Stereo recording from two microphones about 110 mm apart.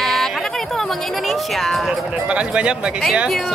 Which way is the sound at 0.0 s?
5° left (ahead or behind).